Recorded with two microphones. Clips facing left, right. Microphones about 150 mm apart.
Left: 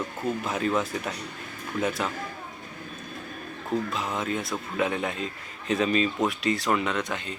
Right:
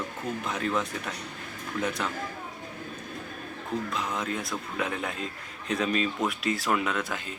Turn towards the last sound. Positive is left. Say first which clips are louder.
# left 2 dB
turn(degrees=-5)  # may be behind; listen again after turning